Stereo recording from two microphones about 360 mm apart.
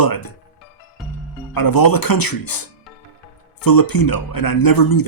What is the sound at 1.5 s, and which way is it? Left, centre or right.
Speech, left.